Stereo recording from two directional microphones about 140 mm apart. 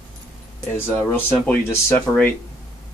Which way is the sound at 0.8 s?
15° left (ahead or behind).